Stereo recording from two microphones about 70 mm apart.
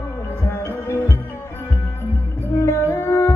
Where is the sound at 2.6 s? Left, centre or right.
Left.